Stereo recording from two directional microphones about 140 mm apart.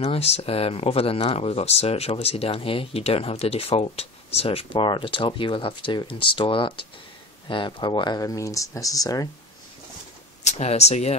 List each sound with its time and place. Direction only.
0.0 s speech: 45° left (ahead or behind); by 9.3 s 25° left (ahead or behind)
10.4 s speech: 50° left (ahead or behind)